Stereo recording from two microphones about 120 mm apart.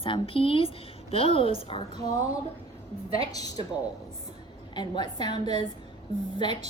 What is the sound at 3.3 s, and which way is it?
Speech, 30° left (ahead or behind).